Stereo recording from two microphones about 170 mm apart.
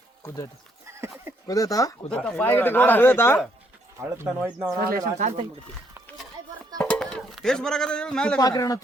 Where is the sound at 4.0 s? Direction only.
15° right (ahead or behind).